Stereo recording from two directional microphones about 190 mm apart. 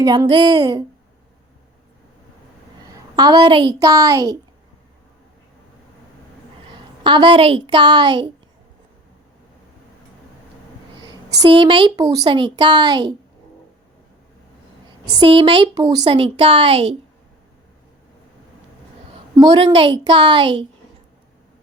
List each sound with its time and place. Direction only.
0.0 s a woman's voice: 20° right (ahead or behind)
2.9 s a woman's voice: 20° right (ahead or behind)
7.0 s a woman's voice: 25° right (ahead or behind)
11.0 s a woman's voice: 20° right (ahead or behind)
15.2 s a woman's voice: 25° right (ahead or behind)
19.4 s a woman's voice: 25° right (ahead or behind)